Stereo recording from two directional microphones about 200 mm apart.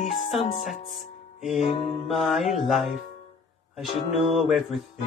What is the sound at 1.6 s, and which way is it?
Music, 35° left (ahead or behind).